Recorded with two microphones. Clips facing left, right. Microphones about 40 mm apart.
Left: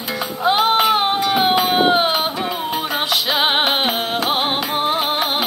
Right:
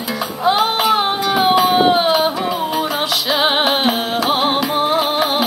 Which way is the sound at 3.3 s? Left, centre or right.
Left.